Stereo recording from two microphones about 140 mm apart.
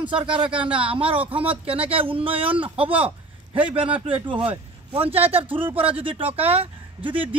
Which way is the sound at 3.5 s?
40° right (ahead or behind).